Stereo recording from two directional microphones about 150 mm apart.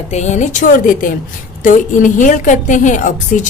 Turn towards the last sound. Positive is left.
turn(degrees=55)  # may be behind; listen again after turning